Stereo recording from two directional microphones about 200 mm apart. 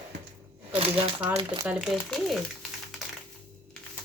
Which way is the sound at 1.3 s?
25° right (ahead or behind).